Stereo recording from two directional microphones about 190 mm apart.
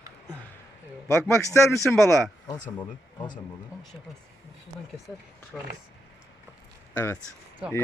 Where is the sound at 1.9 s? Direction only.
5° left (ahead or behind).